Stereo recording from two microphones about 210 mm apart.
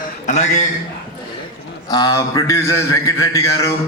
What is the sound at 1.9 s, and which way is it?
A man's voice, 20° left (ahead or behind).